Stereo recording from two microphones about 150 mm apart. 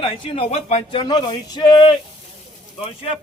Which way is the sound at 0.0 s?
35° left (ahead or behind).